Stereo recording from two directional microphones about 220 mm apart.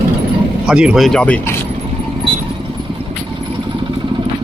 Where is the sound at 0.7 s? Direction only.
5° right (ahead or behind).